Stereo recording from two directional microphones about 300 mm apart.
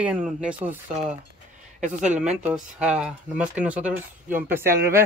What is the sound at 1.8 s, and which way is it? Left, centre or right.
Speech, right.